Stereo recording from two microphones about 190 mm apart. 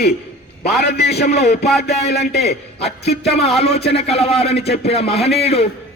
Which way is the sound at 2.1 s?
55° left (ahead or behind).